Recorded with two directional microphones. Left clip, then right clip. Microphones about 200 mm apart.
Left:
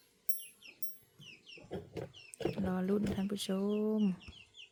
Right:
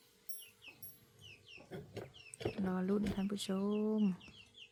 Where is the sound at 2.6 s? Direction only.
20° left (ahead or behind).